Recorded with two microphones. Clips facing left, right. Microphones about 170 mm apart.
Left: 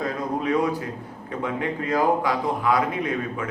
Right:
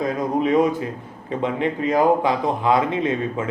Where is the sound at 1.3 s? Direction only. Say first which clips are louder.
Right 5 dB; 20° right (ahead or behind).